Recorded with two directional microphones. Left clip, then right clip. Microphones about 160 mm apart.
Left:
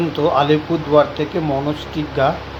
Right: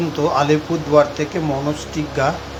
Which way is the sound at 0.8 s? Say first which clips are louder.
Even; 20° right (ahead or behind).